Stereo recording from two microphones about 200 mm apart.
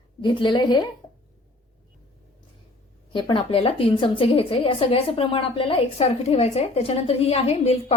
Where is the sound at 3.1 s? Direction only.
25° left (ahead or behind).